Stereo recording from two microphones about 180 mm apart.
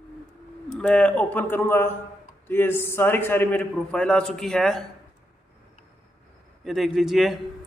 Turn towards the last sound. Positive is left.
turn(degrees=0)  # may be behind; listen again after turning